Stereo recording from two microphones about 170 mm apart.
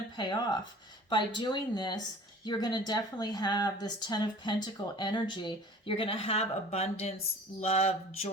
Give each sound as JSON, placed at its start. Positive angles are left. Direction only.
{"t": 0.2, "sound": "speech", "side_deg": 25}
{"t": 7.6, "sound": "mantra", "side_deg": 40}